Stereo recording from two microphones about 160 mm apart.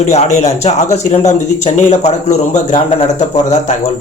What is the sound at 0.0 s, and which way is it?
Speech, 45° left (ahead or behind).